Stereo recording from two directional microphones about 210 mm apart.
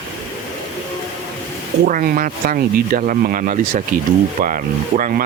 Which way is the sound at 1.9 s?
40° right (ahead or behind).